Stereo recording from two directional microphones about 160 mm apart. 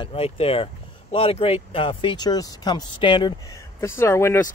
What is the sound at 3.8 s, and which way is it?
Speech, 15° left (ahead or behind).